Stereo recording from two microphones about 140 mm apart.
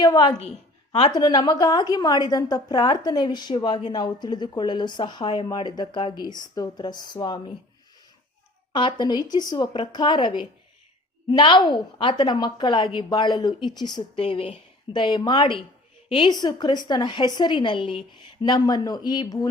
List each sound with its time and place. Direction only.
0.0 s a woman's voice: 30° left (ahead or behind)
8.7 s a woman's voice: 35° left (ahead or behind)